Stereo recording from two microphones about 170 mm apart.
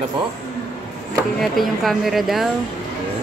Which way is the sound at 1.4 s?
Centre (ahead or behind).